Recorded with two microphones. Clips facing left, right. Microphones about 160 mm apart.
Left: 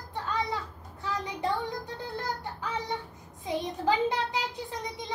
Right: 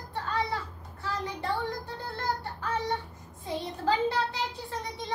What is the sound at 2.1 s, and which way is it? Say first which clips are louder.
Child singing: right 3 dB; 15° left (ahead or behind).